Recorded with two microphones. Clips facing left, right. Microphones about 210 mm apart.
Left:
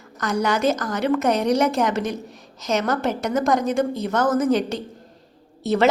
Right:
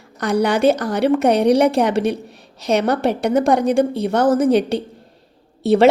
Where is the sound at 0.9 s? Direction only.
60° right (ahead or behind).